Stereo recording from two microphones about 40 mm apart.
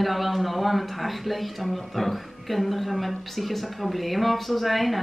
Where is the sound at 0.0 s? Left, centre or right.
Centre.